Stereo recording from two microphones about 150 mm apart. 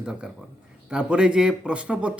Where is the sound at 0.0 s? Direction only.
5° right (ahead or behind).